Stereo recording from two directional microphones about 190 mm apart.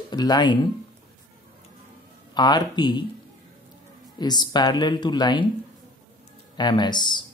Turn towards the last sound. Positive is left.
turn(degrees=25)  # may be behind; listen again after turning